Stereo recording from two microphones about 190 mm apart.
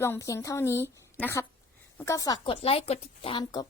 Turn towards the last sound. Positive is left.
turn(degrees=25)  # may be behind; listen again after turning